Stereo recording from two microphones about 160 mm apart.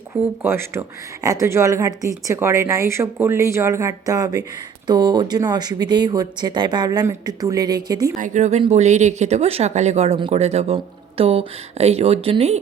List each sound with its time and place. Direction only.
0.4 s speech: 15° right (ahead or behind)
8.1 s speech: 50° right (ahead or behind)